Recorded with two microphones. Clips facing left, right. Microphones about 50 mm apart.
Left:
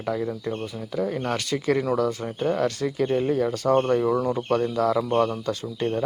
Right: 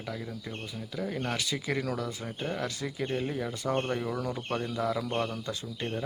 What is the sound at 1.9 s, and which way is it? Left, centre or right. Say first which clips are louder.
Speech: left 11 dB; left.